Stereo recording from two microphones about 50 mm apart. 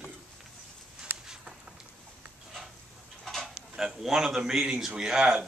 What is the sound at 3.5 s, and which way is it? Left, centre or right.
Speech, centre.